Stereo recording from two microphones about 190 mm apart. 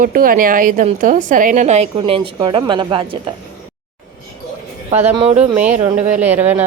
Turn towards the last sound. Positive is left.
turn(degrees=-10)  # may be behind; listen again after turning